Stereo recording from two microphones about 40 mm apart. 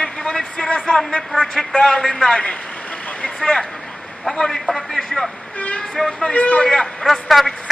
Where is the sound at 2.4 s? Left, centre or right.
Left.